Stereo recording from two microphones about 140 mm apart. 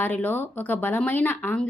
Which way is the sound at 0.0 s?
15° left (ahead or behind).